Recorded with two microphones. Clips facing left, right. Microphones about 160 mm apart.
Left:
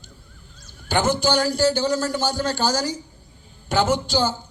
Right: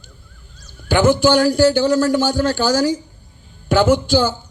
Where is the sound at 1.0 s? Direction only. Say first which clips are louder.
Right 8 dB; 50° right (ahead or behind).